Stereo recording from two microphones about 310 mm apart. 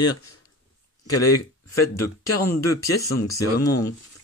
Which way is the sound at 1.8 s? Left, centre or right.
Left.